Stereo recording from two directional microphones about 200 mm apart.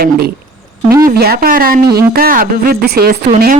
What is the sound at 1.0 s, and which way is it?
A woman's voice, 50° right (ahead or behind).